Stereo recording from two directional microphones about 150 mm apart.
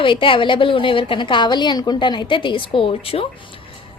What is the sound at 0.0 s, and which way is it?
A woman's voice, 35° left (ahead or behind).